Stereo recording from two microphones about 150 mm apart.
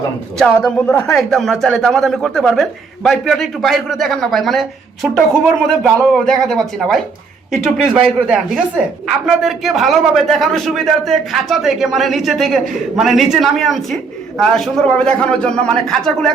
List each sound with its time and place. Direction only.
0.3 s a man's voice: 5° left (ahead or behind)